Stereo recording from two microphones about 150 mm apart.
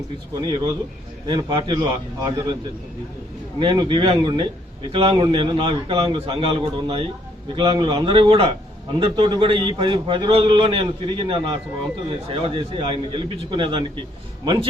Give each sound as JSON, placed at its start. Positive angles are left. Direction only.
{"t": 0.4, "sound": "a man's voice", "side_deg": -35}
{"t": 3.6, "sound": "a man's voice", "side_deg": -35}